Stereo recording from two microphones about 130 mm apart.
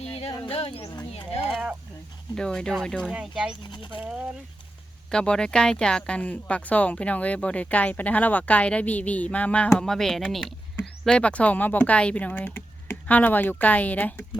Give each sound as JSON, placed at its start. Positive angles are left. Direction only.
{"t": 0.0, "sound": "a sound", "side_deg": 50}
{"t": 2.3, "sound": "speech", "side_deg": 5}
{"t": 3.1, "sound": "speech", "side_deg": -5}
{"t": 3.6, "sound": "speech", "side_deg": 35}
{"t": 4.0, "sound": "speech", "side_deg": -10}
{"t": 5.1, "sound": "speech", "side_deg": 5}